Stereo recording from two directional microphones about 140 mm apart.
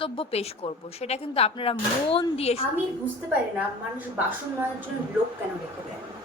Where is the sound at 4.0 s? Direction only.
10° right (ahead or behind).